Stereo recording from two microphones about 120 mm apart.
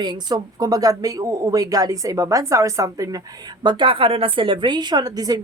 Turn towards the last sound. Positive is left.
turn(degrees=-30)  # may be behind; listen again after turning